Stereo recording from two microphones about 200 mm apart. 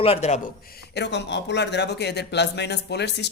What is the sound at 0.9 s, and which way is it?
A man's voice, 60° left (ahead or behind).